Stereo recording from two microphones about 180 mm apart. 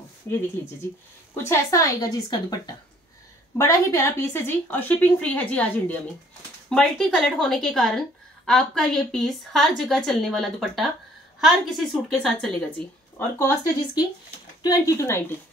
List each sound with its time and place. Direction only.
1.3 s a woman's voice: 15° left (ahead or behind)